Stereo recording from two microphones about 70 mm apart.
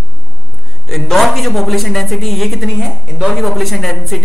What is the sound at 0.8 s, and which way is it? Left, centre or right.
A woman's voice, centre.